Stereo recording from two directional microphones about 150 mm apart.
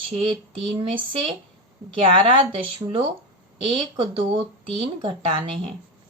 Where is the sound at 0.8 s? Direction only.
35° right (ahead or behind).